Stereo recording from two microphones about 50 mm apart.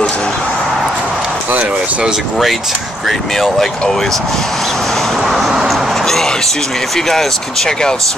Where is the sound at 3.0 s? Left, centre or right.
Centre.